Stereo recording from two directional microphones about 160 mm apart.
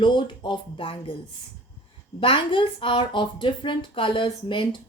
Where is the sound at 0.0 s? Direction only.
30° left (ahead or behind).